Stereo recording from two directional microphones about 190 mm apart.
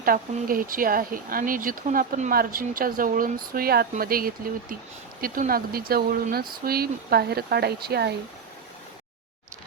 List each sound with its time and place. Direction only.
0.0 s speech: 50° right (ahead or behind)